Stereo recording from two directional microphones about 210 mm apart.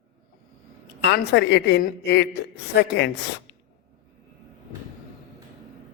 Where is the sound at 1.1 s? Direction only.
55° left (ahead or behind).